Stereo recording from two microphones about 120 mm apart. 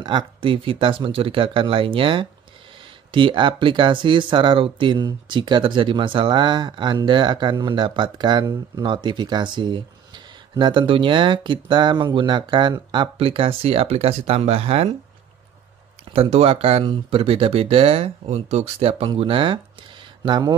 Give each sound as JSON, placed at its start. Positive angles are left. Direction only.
{"t": 0.0, "sound": "speech", "side_deg": -45}
{"t": 16.1, "sound": "speech", "side_deg": -55}